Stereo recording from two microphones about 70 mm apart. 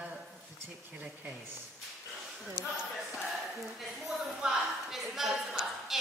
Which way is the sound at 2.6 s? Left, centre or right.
Right.